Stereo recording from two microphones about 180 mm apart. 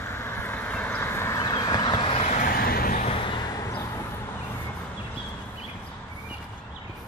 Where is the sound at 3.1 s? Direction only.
30° left (ahead or behind).